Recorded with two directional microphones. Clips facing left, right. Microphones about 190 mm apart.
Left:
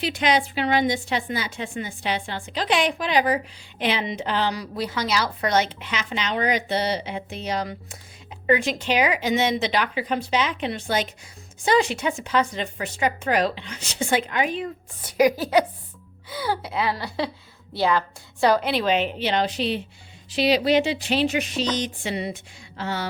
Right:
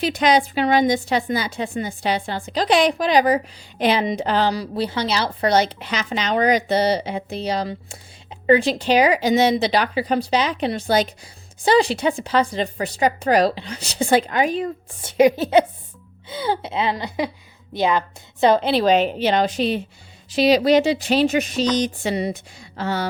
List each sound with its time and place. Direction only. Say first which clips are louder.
0.0 s a woman's voice: right 4 dB; 40° right (ahead or behind)
15.0 s a woman's voice: right 4 dB; 25° right (ahead or behind); by 23.0 s 40° right (ahead or behind)